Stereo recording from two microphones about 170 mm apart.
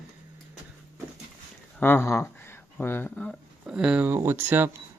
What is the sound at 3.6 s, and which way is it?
Speech, 5° right (ahead or behind).